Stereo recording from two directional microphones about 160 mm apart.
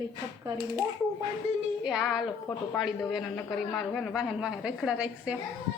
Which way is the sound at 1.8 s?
Centre (ahead or behind).